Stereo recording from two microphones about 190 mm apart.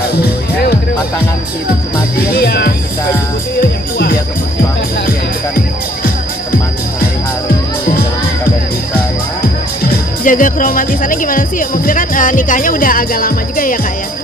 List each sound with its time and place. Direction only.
0.0 s music: 55° left (ahead or behind)
2.1 s speech: 55° left (ahead or behind)
7.8 s music: 55° left (ahead or behind)
9.8 s speech: 45° left (ahead or behind)